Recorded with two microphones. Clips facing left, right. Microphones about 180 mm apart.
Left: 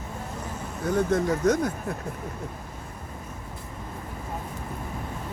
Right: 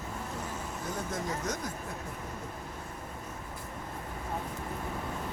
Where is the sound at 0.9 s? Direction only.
65° left (ahead or behind).